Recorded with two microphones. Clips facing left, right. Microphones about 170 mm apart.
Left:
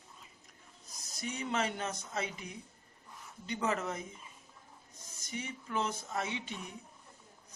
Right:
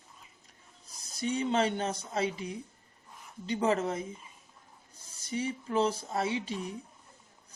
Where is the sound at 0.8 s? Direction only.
30° right (ahead or behind).